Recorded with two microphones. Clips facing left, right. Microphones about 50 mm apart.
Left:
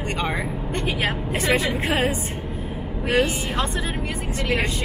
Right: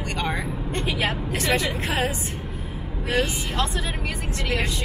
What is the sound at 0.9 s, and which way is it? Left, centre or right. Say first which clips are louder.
A woman's voice: left 1 dB; centre.